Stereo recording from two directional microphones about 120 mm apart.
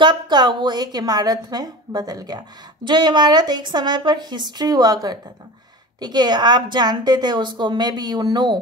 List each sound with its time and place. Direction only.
0.0 s a woman's voice: 40° right (ahead or behind)